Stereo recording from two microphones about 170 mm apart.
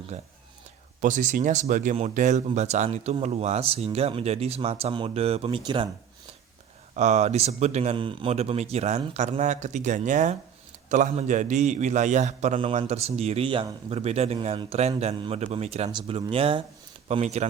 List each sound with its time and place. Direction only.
0.1 s speech: 40° right (ahead or behind)
6.9 s a man's voice: 40° right (ahead or behind)
12.5 s speech: 30° right (ahead or behind)